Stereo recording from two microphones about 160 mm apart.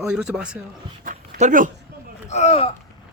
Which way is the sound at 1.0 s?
55° right (ahead or behind).